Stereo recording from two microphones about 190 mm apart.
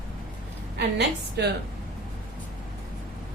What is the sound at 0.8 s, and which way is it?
Speech, 60° right (ahead or behind).